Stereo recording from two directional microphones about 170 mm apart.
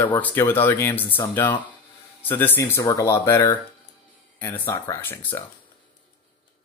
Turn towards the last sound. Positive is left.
turn(degrees=10)  # may be behind; listen again after turning